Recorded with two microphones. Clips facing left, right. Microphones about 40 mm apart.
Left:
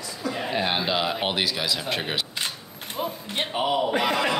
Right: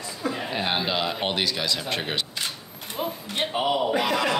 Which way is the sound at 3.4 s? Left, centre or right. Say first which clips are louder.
Even; centre.